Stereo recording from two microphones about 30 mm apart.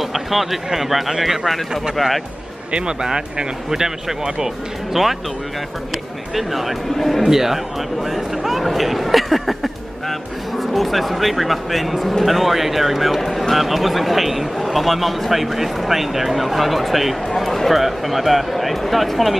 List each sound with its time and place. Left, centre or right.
0.0 s a sound: centre
0.7 s a man's voice: centre
2.0 s a man's voice: centre
3.0 s speech: right
5.0 s a man's voice: centre
6.3 s a man's voice: centre
7.2 s a man's voice: centre
8.7 s a sound: centre
10.6 s a man's voice: centre
17.3 s a man's voice: centre